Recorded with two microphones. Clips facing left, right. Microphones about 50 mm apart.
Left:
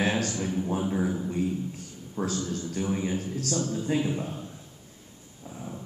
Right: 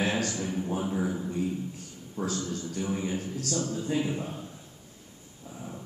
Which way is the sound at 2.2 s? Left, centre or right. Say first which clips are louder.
Left 2 dB; left.